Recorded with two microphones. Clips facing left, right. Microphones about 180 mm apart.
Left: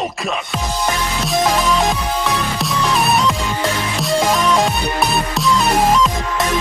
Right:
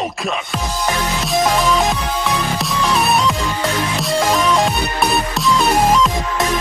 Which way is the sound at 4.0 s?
Centre (ahead or behind).